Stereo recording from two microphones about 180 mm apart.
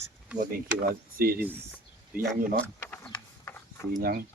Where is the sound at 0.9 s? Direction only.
55° right (ahead or behind).